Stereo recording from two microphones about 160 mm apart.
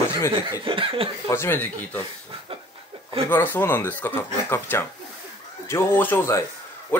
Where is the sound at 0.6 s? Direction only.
35° right (ahead or behind).